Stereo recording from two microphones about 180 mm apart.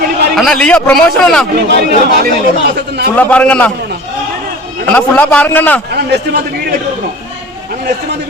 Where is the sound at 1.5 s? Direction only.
60° right (ahead or behind).